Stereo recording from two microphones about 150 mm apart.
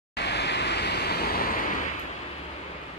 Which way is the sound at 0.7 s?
90° left.